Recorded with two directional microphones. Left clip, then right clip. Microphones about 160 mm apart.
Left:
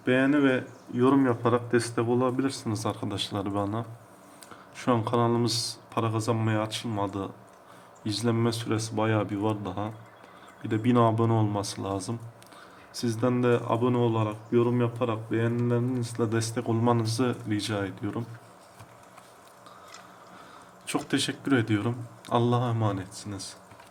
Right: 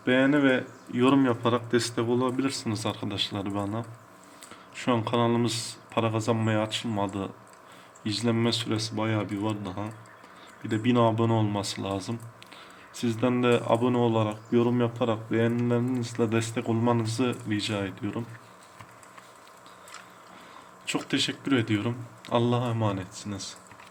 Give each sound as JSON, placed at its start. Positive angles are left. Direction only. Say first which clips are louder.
{"t": 0.0, "sound": "speech", "louder": "right 1 dB", "side_deg": -25}
{"t": 2.6, "sound": "speech", "louder": "even", "side_deg": -5}
{"t": 4.9, "sound": "speech", "louder": "even", "side_deg": -5}
{"t": 13.1, "sound": "speech", "louder": "right 1 dB", "side_deg": -20}
{"t": 20.9, "sound": "speech", "louder": "right 1 dB", "side_deg": -5}